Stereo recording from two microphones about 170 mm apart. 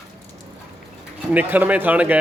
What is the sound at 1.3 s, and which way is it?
Speech, 10° right (ahead or behind).